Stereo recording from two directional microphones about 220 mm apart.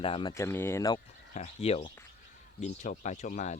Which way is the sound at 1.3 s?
30° left (ahead or behind).